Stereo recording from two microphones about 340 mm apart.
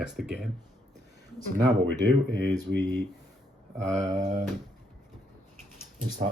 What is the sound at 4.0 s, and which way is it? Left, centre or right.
Speech, centre.